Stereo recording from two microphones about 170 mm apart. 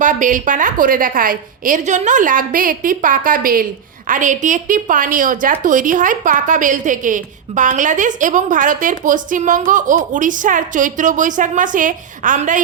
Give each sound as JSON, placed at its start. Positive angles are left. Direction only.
{"t": 0.0, "sound": "a woman's voice", "side_deg": -50}